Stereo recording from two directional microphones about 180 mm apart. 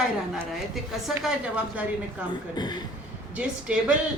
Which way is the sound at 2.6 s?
25° left (ahead or behind).